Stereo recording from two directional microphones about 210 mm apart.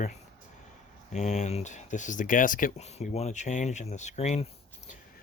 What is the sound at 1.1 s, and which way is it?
Speech, 35° left (ahead or behind).